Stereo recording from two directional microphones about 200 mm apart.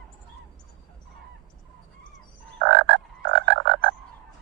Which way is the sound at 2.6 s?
60° right (ahead or behind).